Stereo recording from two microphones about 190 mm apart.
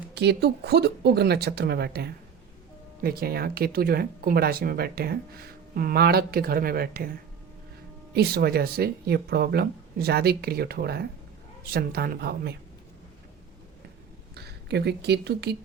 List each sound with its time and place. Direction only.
0.1 s speech: 60° right (ahead or behind)
8.1 s speech: 55° right (ahead or behind)
14.3 s speech: 60° right (ahead or behind)